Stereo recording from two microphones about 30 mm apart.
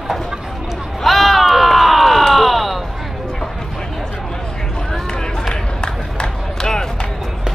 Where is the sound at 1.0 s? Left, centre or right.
Centre.